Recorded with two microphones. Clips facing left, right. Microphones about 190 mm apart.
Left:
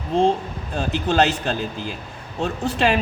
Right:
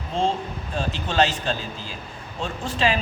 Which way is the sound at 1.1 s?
60° left (ahead or behind).